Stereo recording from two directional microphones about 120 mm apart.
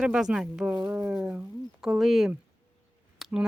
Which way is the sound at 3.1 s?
5° right (ahead or behind).